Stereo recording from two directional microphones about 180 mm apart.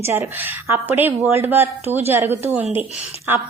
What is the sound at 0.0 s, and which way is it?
Speech, 15° right (ahead or behind).